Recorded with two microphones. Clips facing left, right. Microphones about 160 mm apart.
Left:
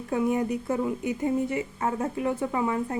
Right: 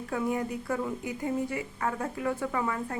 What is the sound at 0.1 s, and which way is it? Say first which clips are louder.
Speech: left 5 dB; 20° left (ahead or behind).